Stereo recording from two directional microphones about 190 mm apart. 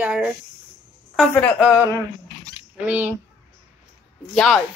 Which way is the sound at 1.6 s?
5° right (ahead or behind).